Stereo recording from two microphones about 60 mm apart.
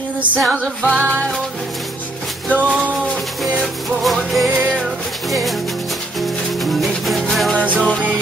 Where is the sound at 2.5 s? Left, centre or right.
Right.